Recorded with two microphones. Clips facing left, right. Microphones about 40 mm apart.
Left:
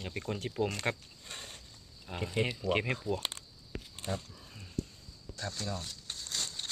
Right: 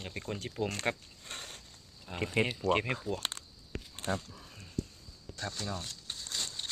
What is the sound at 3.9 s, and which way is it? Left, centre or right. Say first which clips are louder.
Speech: right 3 dB; right.